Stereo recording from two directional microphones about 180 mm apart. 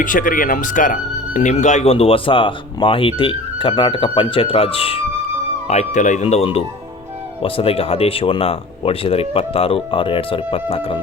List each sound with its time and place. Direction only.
0.0 s speech: 50° left (ahead or behind); by 11.0 s 30° left (ahead or behind)